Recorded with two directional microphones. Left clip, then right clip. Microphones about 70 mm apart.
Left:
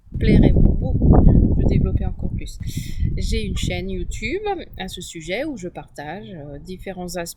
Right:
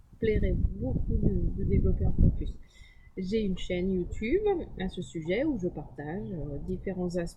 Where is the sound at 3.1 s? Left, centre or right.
Left.